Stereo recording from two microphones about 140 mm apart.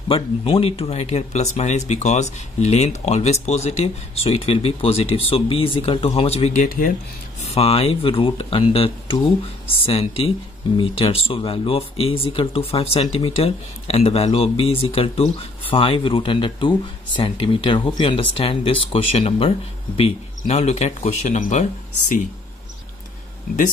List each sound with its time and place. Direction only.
0.1 s speech: 40° left (ahead or behind)
7.5 s speech: 45° left (ahead or behind)